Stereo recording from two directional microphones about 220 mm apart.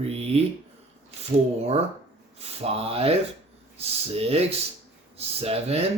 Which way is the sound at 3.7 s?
25° right (ahead or behind).